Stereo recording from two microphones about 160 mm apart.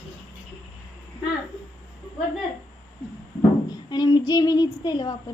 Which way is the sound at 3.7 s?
25° left (ahead or behind).